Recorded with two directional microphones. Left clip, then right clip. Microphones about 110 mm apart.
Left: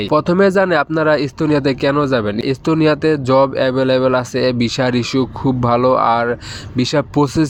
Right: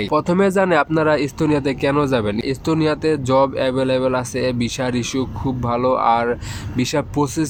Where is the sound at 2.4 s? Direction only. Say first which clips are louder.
Left 4 dB; 50° left (ahead or behind).